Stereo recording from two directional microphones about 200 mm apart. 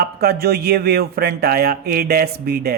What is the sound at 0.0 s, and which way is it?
A man's voice, 50° right (ahead or behind).